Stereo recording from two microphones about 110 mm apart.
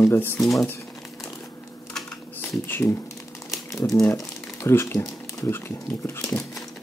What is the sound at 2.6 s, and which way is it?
Speech, 20° left (ahead or behind).